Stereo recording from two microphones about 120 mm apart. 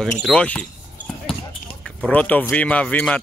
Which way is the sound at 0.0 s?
5° left (ahead or behind).